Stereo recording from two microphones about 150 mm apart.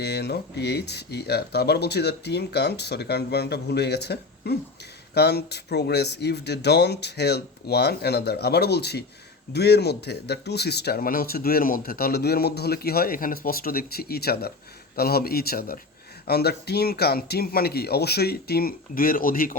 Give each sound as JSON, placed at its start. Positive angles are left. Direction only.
{"t": 0.0, "sound": "speech", "side_deg": 90}
{"t": 16.2, "sound": "speech", "side_deg": 90}